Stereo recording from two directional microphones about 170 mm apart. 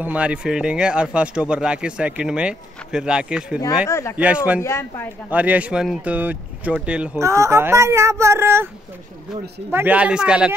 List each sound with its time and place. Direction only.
0.0 s speech: 5° right (ahead or behind)
3.9 s a woman's voice: 15° left (ahead or behind)
4.2 s speech: 10° right (ahead or behind)
4.6 s a woman's voice: 15° left (ahead or behind)
5.3 s speech: 10° right (ahead or behind)
7.2 s speech: 15° right (ahead or behind)
9.7 s speech: 10° right (ahead or behind)